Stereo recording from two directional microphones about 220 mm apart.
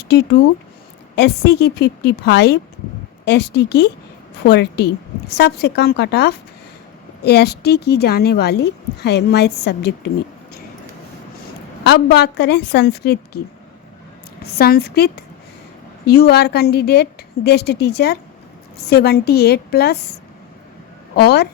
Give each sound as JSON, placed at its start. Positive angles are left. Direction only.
{"t": 1.1, "sound": "speech", "side_deg": 50}
{"t": 11.8, "sound": "speech", "side_deg": 50}
{"t": 14.4, "sound": "speech", "side_deg": 45}
{"t": 21.2, "sound": "speech", "side_deg": 45}